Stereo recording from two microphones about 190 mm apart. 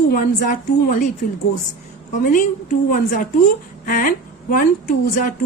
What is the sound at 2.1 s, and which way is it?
Speech, 40° left (ahead or behind).